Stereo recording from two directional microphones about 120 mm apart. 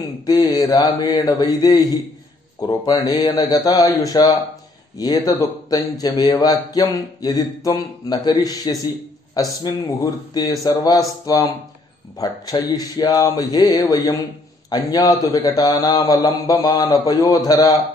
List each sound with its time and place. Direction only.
0.3 s a man's voice: 35° left (ahead or behind)